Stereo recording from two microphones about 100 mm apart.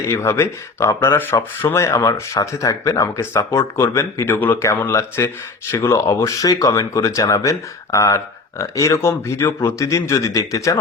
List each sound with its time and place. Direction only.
0.1 s speech: 25° left (ahead or behind)